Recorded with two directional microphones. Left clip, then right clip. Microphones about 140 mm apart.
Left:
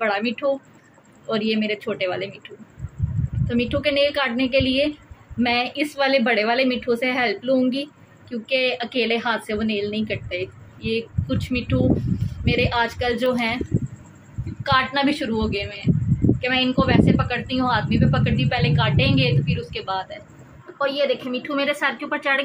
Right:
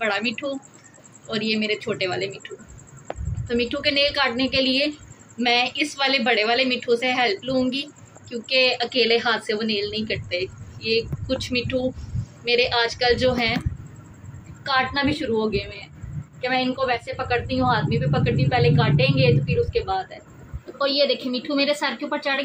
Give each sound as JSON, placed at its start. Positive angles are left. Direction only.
{"t": 0.0, "sound": "a woman's voice", "side_deg": 35}
{"t": 3.4, "sound": "a woman's voice", "side_deg": 25}
{"t": 8.5, "sound": "a woman's voice", "side_deg": 20}
{"t": 14.6, "sound": "a woman's voice", "side_deg": 25}
{"t": 20.7, "sound": "a woman's voice", "side_deg": -15}